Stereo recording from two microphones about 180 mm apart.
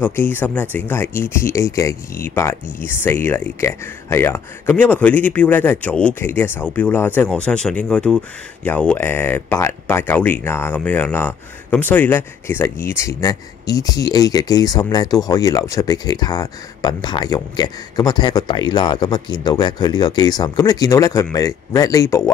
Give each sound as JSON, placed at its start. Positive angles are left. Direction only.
{"t": 0.0, "sound": "speech", "side_deg": 10}